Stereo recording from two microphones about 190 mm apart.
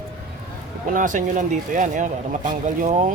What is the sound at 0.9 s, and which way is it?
Speech, 45° right (ahead or behind).